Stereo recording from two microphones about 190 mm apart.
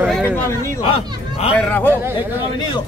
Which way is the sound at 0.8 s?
30° left (ahead or behind).